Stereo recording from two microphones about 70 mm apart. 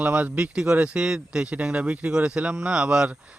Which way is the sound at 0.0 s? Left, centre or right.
Right.